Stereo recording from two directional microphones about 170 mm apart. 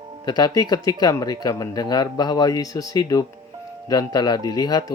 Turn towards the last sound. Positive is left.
turn(degrees=20)  # may be behind; listen again after turning